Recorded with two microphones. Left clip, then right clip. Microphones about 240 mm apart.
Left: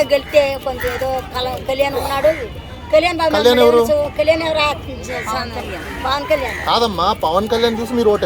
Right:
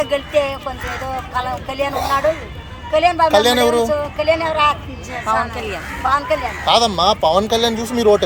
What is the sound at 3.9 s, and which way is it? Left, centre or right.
Speech, centre.